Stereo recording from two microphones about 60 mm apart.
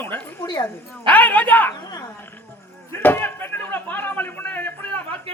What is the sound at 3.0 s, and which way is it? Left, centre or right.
Speech, left.